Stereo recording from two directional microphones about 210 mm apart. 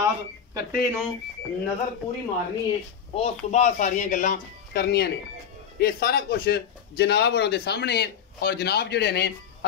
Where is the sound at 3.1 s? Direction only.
30° left (ahead or behind).